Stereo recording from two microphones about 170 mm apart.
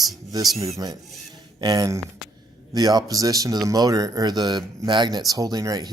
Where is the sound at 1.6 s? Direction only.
25° right (ahead or behind).